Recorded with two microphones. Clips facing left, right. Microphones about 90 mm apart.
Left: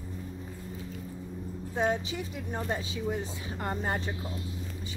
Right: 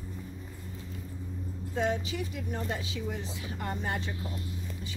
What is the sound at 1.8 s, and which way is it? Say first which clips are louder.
Speech: left 1 dB; 25° left (ahead or behind).